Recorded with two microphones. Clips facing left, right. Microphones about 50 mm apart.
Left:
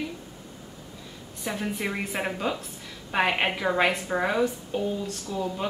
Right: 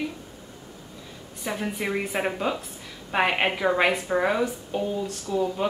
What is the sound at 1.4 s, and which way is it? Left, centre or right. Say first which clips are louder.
A woman's voice: right 1 dB; centre.